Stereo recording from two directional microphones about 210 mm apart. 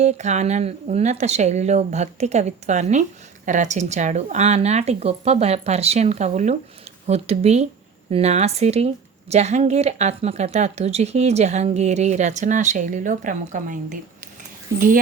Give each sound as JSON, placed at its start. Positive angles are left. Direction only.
{"t": 0.0, "sound": "speech", "side_deg": -35}